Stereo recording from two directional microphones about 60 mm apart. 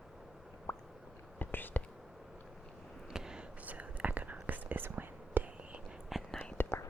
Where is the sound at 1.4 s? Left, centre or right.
Left.